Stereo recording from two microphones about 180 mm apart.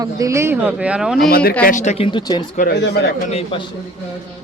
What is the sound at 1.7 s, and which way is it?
Speech, 40° left (ahead or behind).